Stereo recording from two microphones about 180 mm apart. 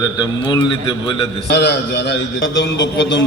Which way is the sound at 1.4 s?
65° left (ahead or behind).